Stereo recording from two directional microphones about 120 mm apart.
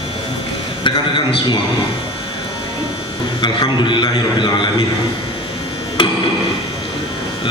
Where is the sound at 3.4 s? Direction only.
40° left (ahead or behind).